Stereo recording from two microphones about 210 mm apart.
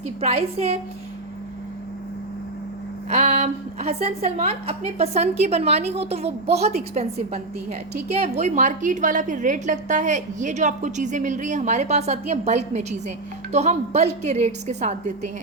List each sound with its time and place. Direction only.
0.2 s a woman's voice: 30° right (ahead or behind)
3.1 s a woman's voice: 35° right (ahead or behind)